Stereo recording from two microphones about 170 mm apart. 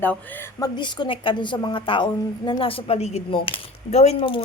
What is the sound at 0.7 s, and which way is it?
A woman's voice, 25° left (ahead or behind).